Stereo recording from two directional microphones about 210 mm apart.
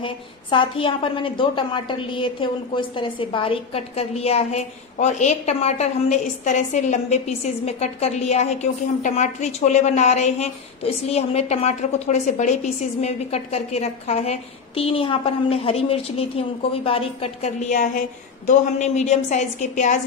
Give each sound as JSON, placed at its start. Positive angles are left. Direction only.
{"t": 0.0, "sound": "a woman's voice", "side_deg": 25}